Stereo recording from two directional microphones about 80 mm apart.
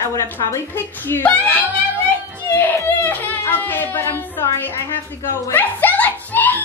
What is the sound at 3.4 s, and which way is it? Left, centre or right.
A woman's voice, left.